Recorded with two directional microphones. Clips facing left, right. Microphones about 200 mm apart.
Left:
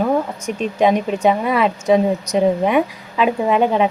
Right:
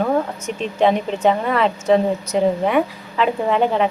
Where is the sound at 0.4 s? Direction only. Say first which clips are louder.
Left 2 dB; 10° left (ahead or behind).